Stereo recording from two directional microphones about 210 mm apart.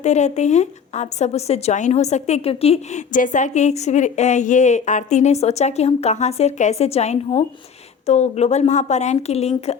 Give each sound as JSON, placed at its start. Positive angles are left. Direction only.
{"t": 0.0, "sound": "speech", "side_deg": 35}